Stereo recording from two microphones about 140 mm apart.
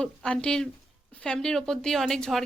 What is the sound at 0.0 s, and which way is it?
A woman's voice, 5° left (ahead or behind).